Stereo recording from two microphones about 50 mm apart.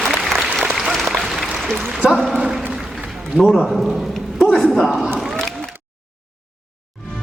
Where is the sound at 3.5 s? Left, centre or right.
Centre.